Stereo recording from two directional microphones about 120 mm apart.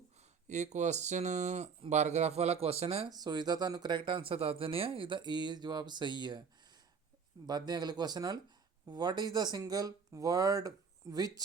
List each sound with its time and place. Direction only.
0.4 s speech: 75° right (ahead or behind); by 3.1 s 55° right (ahead or behind)
3.1 s speech: 35° right (ahead or behind)
7.4 s speech: 35° right (ahead or behind)